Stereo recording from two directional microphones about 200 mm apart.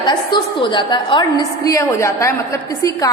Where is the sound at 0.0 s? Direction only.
25° left (ahead or behind).